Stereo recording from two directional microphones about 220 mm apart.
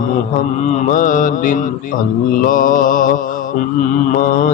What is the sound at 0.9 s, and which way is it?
Mantra, 35° left (ahead or behind).